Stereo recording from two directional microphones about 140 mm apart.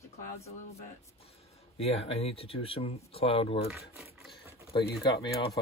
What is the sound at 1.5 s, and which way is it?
Speech, 45° left (ahead or behind).